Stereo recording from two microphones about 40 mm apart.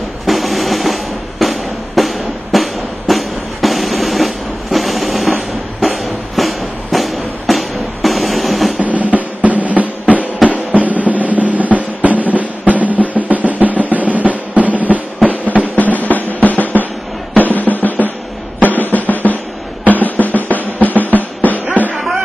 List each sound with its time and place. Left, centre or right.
0.3 s music: centre
8.7 s drum: right
15.7 s drum: left
17.8 s music: left
18.6 s drum: left
21.9 s music: centre